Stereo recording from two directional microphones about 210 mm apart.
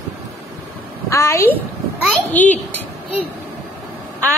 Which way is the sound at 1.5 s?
Centre (ahead or behind).